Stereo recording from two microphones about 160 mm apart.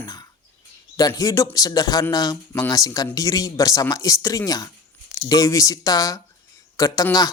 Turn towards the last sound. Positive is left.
turn(degrees=20)  # may be behind; listen again after turning